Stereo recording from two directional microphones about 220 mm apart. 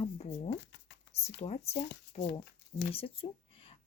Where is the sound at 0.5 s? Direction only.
50° left (ahead or behind).